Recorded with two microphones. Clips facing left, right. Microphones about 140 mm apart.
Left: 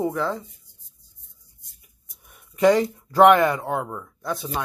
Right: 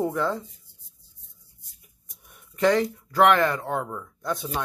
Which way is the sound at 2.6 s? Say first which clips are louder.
Left 4 dB; 15° left (ahead or behind).